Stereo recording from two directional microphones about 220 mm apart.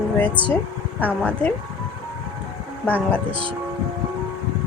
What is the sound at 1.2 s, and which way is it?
Speech, 5° left (ahead or behind).